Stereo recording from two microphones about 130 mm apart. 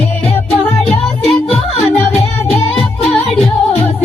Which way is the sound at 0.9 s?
10° left (ahead or behind).